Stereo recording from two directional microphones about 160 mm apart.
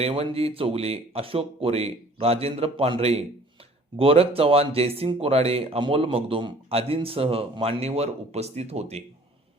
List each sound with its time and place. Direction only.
0.0 s speech: 40° right (ahead or behind)